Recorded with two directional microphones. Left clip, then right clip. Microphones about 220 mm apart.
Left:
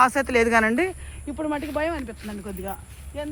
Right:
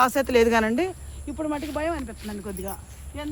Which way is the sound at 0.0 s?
15° right (ahead or behind).